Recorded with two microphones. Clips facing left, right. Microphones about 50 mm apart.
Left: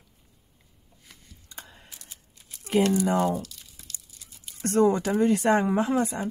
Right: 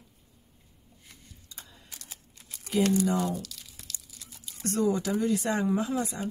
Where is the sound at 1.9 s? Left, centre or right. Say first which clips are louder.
Right 1 dB; right.